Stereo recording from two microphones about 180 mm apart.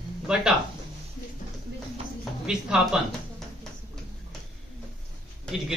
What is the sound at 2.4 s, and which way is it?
Speech, 5° right (ahead or behind).